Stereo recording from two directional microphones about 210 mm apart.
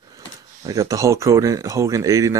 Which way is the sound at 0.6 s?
15° right (ahead or behind).